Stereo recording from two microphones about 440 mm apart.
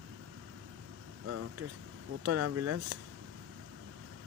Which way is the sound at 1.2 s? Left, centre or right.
Right.